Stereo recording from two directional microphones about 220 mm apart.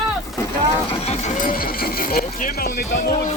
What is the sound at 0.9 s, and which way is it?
Speech, 30° left (ahead or behind).